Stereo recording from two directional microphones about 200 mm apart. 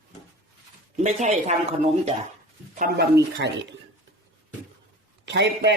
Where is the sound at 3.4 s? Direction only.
60° right (ahead or behind).